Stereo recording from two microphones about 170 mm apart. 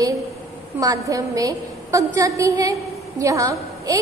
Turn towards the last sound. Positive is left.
turn(degrees=-20)  # may be behind; listen again after turning